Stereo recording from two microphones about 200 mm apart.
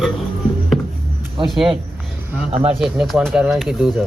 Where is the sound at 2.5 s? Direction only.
30° right (ahead or behind).